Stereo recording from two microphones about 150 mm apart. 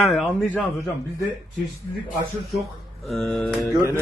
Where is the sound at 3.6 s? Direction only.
25° left (ahead or behind).